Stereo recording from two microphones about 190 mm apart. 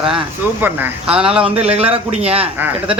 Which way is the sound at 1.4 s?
30° right (ahead or behind).